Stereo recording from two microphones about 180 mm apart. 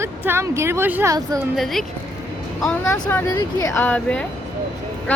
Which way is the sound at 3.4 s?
20° left (ahead or behind).